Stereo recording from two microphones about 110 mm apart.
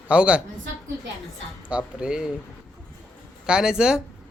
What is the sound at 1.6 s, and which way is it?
Speech, 10° right (ahead or behind).